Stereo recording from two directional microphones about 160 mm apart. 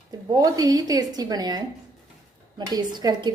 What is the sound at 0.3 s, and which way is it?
A woman's voice, 20° right (ahead or behind).